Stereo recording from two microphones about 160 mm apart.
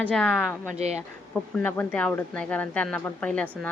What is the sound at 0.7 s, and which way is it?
Speech, 45° right (ahead or behind).